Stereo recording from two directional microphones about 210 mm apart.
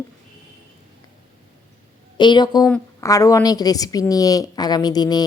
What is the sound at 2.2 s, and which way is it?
A woman's voice, 20° left (ahead or behind).